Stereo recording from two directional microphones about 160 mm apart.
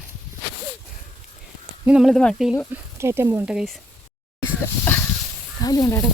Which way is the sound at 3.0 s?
15° right (ahead or behind).